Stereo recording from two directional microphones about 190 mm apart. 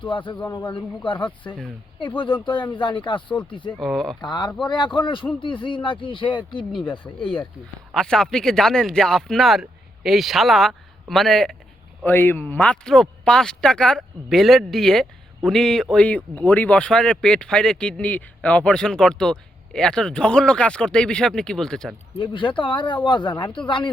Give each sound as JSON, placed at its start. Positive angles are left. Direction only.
{"t": 0.0, "sound": "speech", "side_deg": 25}
{"t": 3.8, "sound": "speech", "side_deg": 0}
{"t": 4.2, "sound": "speech", "side_deg": 20}
{"t": 7.9, "sound": "speech", "side_deg": 5}
{"t": 22.2, "sound": "speech", "side_deg": 25}